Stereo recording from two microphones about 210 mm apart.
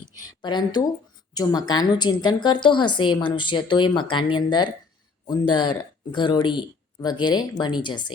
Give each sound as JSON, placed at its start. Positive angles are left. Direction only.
{"t": 0.2, "sound": "a woman's voice", "side_deg": 20}